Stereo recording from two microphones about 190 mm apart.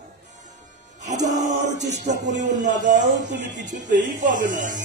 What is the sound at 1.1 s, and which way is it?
Speech, 40° right (ahead or behind).